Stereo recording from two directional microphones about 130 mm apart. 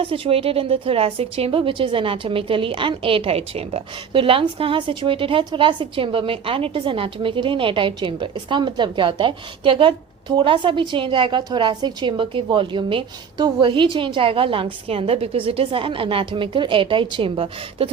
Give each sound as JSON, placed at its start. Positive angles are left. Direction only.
{"t": 0.0, "sound": "a woman's voice", "side_deg": -45}